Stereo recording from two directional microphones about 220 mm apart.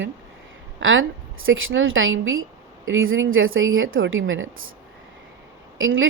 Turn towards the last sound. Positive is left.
turn(degrees=-60)  # may be behind; listen again after turning